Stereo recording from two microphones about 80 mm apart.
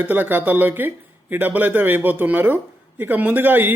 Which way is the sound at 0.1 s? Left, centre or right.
Right.